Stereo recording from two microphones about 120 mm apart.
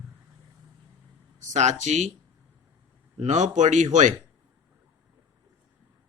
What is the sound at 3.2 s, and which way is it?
Speech, 85° right.